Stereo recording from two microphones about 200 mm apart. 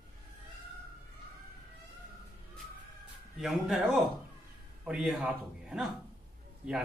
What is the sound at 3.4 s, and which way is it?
A man's voice, centre (ahead or behind).